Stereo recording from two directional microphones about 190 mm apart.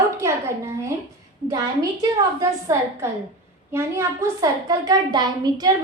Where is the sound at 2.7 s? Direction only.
15° right (ahead or behind).